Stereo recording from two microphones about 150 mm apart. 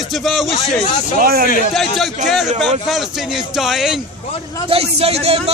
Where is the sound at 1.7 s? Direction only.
Centre (ahead or behind).